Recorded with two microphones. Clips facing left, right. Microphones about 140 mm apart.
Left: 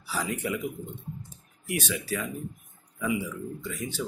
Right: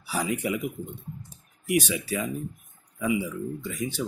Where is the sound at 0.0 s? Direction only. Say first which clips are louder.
Right 3 dB; 15° right (ahead or behind).